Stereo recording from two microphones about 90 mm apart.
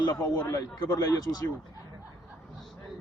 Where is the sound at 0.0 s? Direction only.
50° left (ahead or behind).